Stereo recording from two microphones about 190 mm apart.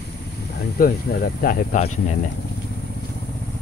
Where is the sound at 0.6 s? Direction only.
55° left (ahead or behind).